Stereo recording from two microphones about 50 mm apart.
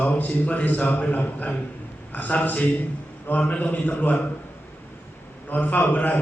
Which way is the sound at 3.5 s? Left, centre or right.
Left.